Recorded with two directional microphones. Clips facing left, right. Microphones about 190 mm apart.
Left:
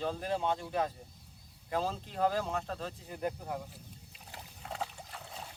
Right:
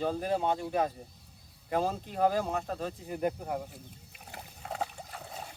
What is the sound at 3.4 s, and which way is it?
Speech, 45° right (ahead or behind).